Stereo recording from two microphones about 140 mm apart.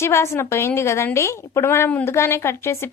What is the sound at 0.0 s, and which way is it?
A woman's voice, 20° left (ahead or behind).